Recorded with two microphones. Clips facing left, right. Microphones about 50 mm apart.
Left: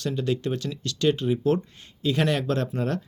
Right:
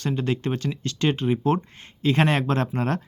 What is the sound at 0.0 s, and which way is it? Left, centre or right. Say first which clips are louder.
Speech: right 1 dB; right.